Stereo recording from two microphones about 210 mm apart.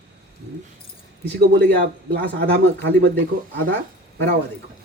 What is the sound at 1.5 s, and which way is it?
Speech, 50° right (ahead or behind).